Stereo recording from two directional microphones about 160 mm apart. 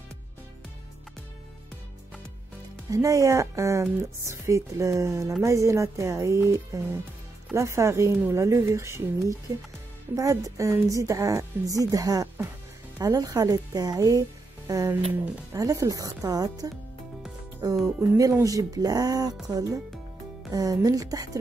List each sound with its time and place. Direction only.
2.9 s a woman's voice: 20° right (ahead or behind)